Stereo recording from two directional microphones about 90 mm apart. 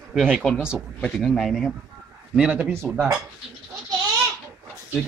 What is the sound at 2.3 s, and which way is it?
Speech, 10° right (ahead or behind).